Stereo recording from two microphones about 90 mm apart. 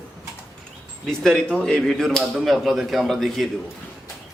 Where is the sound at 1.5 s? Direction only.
5° left (ahead or behind).